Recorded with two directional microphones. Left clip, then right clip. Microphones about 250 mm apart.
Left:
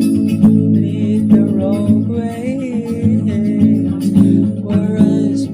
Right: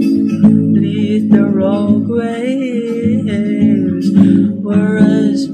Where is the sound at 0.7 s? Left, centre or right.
Left.